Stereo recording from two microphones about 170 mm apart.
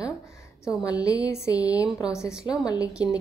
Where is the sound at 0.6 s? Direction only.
20° left (ahead or behind).